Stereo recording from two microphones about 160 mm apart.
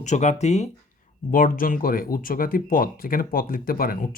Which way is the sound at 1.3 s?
60° left (ahead or behind).